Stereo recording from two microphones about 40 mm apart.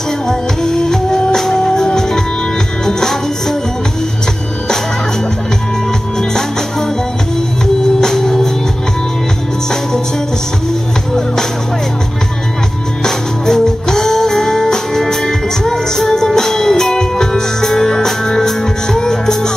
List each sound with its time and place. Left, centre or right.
0.3 s music: centre
8.0 s music: centre
13.0 s music: centre